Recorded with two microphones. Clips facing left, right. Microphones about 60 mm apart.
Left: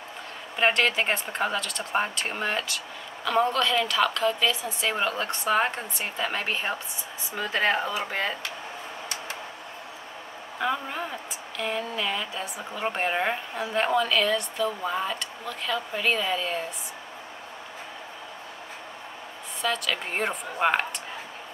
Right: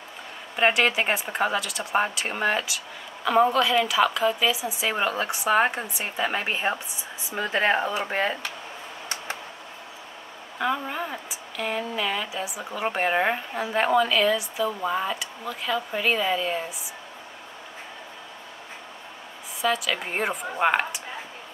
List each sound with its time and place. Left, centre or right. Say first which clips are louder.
0.6 s a woman's voice: right 2 dB; centre; by 8.4 s right
10.6 s a woman's voice: right 2 dB; centre
19.6 s a woman's voice: right 3 dB; centre